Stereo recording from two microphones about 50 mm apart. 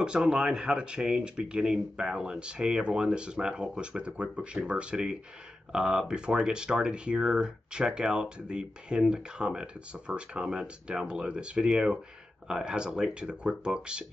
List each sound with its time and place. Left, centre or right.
0.0 s speech: centre
10.5 s speech: centre